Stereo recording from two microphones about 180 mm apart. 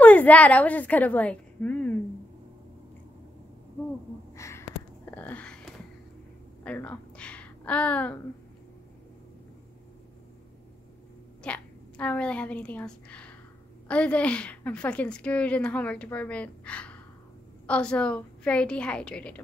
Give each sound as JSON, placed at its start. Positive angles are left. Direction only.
{"t": 0.0, "sound": "a woman's voice", "side_deg": 10}
{"t": 4.4, "sound": "a sound", "side_deg": 15}
{"t": 6.6, "sound": "a woman's voice", "side_deg": 10}
{"t": 11.4, "sound": "a woman's voice", "side_deg": 5}